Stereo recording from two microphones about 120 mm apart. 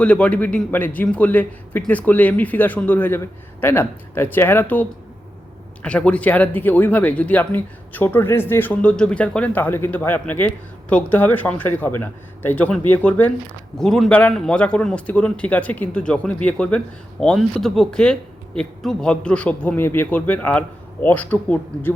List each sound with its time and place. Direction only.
0.0 s a man's voice: 10° left (ahead or behind)